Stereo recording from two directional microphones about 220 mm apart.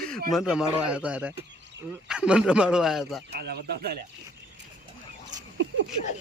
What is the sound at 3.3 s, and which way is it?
Speech, 45° right (ahead or behind).